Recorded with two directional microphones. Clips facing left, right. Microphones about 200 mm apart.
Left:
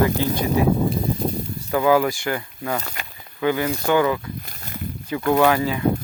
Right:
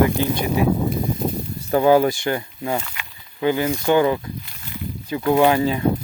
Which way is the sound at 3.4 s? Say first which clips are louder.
Right 2 dB; 25° right (ahead or behind).